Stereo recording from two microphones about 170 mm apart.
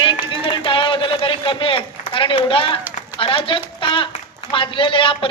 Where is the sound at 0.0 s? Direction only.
30° left (ahead or behind).